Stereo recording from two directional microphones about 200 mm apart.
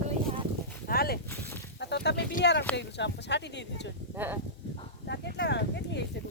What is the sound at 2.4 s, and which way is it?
Speech, 60° left (ahead or behind).